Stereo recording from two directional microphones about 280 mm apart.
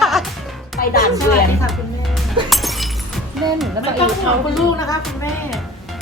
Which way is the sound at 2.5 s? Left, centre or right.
Centre.